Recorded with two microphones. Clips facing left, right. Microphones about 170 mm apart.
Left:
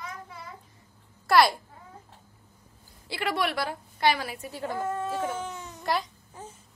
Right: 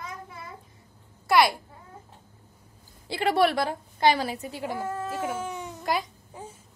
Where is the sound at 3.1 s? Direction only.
30° right (ahead or behind).